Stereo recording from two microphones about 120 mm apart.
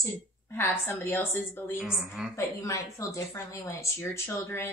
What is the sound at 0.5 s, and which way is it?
Speech, 20° left (ahead or behind).